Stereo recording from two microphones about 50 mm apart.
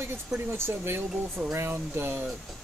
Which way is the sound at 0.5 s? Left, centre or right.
Right.